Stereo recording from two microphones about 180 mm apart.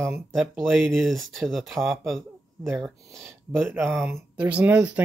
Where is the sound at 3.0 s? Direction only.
15° right (ahead or behind).